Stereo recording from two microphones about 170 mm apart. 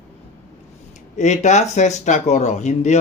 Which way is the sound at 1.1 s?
45° left (ahead or behind).